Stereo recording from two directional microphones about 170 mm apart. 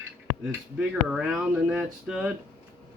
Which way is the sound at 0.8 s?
5° right (ahead or behind).